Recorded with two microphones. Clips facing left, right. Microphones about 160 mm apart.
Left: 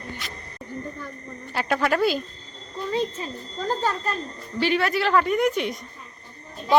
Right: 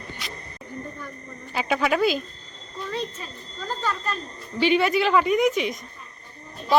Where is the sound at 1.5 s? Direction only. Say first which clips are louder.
Even; 5° right (ahead or behind).